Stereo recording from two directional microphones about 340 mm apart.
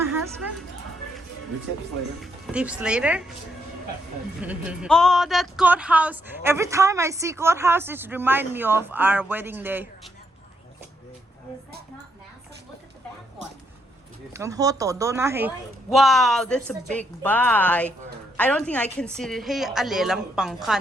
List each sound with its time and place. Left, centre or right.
2.2 s speech: centre
4.4 s speech: centre
14.3 s a woman's voice: centre